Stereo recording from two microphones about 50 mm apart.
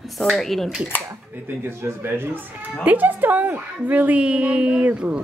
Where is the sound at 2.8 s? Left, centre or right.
Right.